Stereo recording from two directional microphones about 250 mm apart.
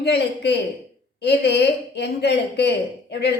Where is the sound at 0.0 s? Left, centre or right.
Left.